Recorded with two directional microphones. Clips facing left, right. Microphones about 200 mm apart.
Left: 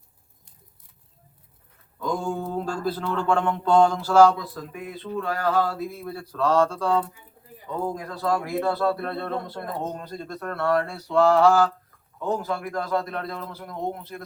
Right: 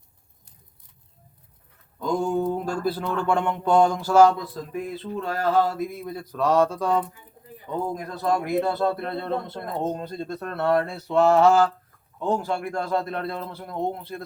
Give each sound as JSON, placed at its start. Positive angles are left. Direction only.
{"t": 2.0, "sound": "speech", "side_deg": -20}
{"t": 4.7, "sound": "a man's voice", "side_deg": -30}